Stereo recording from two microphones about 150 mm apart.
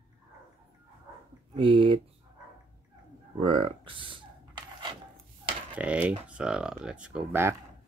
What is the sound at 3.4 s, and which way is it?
Speech, 35° right (ahead or behind).